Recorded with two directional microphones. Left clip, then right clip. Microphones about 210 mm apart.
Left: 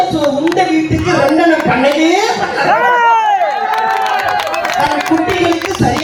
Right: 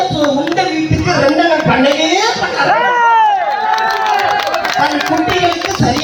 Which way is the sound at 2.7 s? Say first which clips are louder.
Left 1 dB; 20° left (ahead or behind).